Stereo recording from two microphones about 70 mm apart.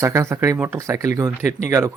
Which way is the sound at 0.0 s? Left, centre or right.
Right.